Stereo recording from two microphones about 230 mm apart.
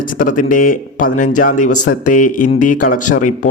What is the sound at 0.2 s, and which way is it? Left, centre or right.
A man's voice, left.